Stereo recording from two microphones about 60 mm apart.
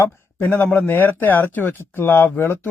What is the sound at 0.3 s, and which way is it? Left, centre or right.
Speech, left.